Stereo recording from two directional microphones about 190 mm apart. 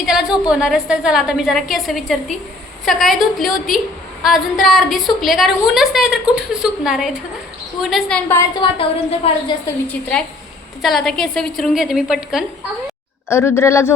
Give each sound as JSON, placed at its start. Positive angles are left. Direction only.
{"t": 0.0, "sound": "a woman's voice", "side_deg": -5}
{"t": 8.5, "sound": "a woman's voice", "side_deg": 25}
{"t": 9.8, "sound": "a woman's voice", "side_deg": 5}
{"t": 13.2, "sound": "speech", "side_deg": 15}